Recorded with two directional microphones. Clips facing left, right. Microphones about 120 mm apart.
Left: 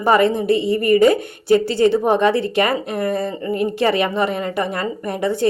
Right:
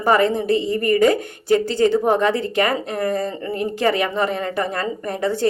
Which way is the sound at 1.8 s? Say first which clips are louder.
Left 2 dB; 20° left (ahead or behind).